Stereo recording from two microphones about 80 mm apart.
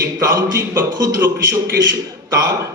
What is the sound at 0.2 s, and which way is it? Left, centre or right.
Speech, right.